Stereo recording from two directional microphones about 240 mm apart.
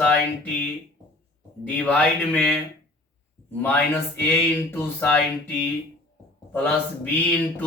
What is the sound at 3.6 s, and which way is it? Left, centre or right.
Speech, centre.